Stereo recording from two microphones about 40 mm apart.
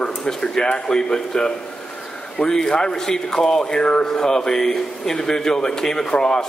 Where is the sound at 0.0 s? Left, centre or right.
Centre.